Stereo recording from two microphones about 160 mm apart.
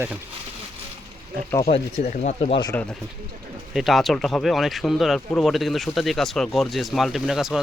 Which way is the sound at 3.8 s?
Centre (ahead or behind).